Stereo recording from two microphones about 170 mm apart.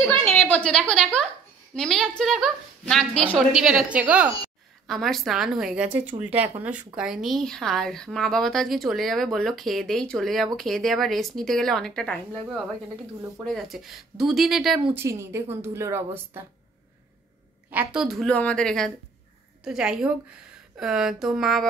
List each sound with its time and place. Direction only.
0.4 s a sound: 10° left (ahead or behind)
1.8 s speech: 5° left (ahead or behind)
13.5 s speech: centre (ahead or behind)
15.0 s a woman's voice: 15° right (ahead or behind)
17.6 s speech: 5° right (ahead or behind)